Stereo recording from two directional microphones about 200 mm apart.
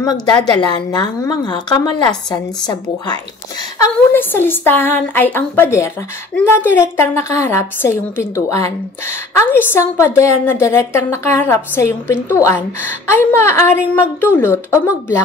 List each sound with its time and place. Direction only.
0.0 s a woman's voice: 20° left (ahead or behind)